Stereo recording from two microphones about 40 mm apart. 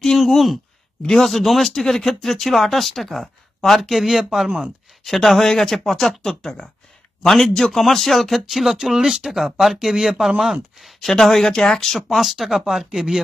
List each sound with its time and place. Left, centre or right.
0.2 s speech: centre
3.9 s speech: centre
5.0 s speech: centre
12.1 s speech: centre